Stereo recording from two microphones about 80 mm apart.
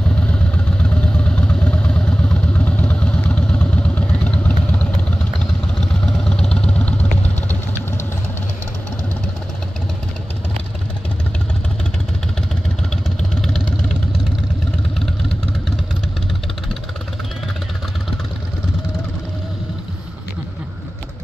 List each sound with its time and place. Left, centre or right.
0.8 s vehicle: centre
5.8 s vehicle: centre
13.3 s vehicle: centre